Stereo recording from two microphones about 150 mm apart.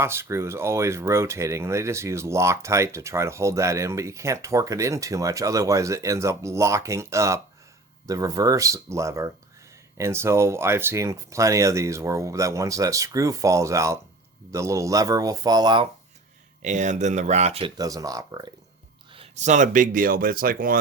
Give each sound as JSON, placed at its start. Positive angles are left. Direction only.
{"t": 0.0, "sound": "speech", "side_deg": -15}
{"t": 16.6, "sound": "speech", "side_deg": -55}
{"t": 17.7, "sound": "speech", "side_deg": -25}
{"t": 19.1, "sound": "speech", "side_deg": -45}